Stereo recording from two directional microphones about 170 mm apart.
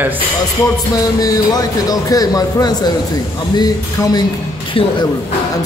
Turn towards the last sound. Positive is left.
turn(degrees=30)  # may be behind; listen again after turning